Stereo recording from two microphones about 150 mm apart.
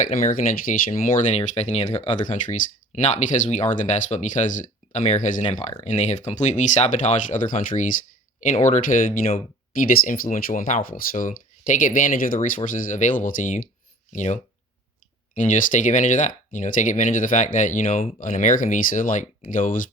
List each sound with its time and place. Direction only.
0.0 s speech: 65° left (ahead or behind)
1.4 s speech: 45° left (ahead or behind); by 9.0 s 60° left (ahead or behind)
10.1 s speech: 65° left (ahead or behind)
15.4 s speech: 60° left (ahead or behind)